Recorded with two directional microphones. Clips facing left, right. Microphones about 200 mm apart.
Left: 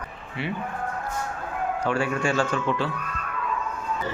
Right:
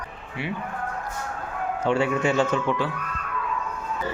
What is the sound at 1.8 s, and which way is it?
Speech, 25° right (ahead or behind).